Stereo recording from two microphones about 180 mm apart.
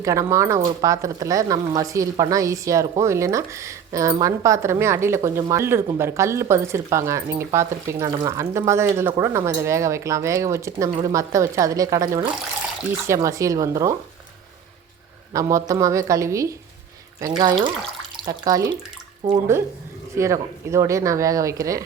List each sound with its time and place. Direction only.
0.0 s speech: 15° right (ahead or behind)
15.3 s speech: 20° right (ahead or behind)